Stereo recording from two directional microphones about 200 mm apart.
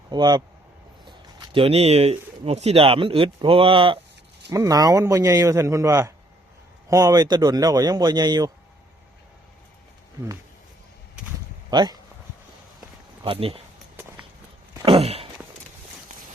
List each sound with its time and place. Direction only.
0.1 s a man's voice: 20° right (ahead or behind)
11.7 s a man's voice: 20° right (ahead or behind)
13.2 s a man's voice: 30° right (ahead or behind)
14.8 s walk: 30° right (ahead or behind)